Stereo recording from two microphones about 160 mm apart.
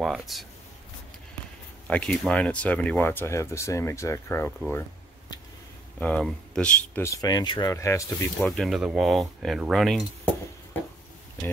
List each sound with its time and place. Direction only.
0.0 s speech: centre (ahead or behind)
1.9 s speech: 5° left (ahead or behind)
5.9 s speech: 10° left (ahead or behind)
7.1 s speech: 25° left (ahead or behind)
8.5 s speech: centre (ahead or behind)